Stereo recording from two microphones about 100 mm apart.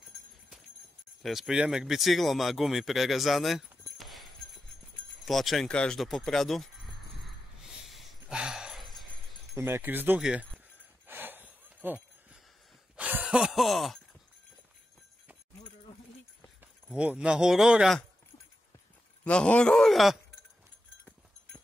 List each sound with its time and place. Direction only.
1.2 s speech: 5° right (ahead or behind)
7.8 s a sound: centre (ahead or behind)
9.6 s speech: 25° right (ahead or behind)
11.1 s a sound: 20° right (ahead or behind); by 13.9 s centre (ahead or behind)
16.9 s speech: 10° right (ahead or behind)
19.2 s a man's voice: 10° left (ahead or behind)